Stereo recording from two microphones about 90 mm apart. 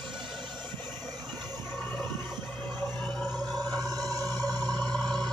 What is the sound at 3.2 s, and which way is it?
Music, 5° right (ahead or behind).